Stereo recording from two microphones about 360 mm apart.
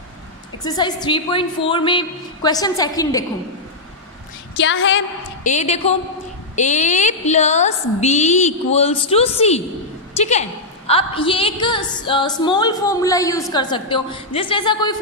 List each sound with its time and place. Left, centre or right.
0.7 s a woman's voice: centre
4.6 s a woman's voice: left
5.4 s a woman's voice: centre